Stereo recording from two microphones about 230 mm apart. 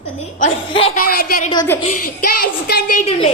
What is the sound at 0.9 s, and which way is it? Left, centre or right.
Speech, left.